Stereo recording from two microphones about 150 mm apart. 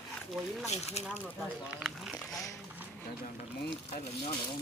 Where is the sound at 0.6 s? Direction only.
45° left (ahead or behind).